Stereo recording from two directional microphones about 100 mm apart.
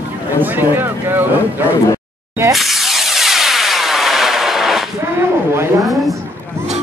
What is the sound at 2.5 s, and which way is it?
Vehicle, centre (ahead or behind).